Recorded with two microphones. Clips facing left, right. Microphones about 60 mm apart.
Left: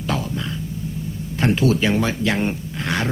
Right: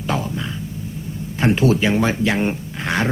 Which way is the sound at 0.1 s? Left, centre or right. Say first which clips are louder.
Right 2 dB; centre.